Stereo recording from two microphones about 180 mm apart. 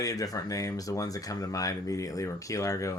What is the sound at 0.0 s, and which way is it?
Speech, 20° left (ahead or behind).